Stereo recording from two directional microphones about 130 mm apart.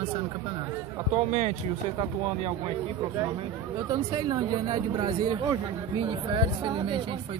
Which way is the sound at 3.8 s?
30° right (ahead or behind).